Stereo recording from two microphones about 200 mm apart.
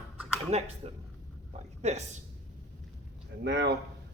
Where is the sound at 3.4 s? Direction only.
60° right (ahead or behind).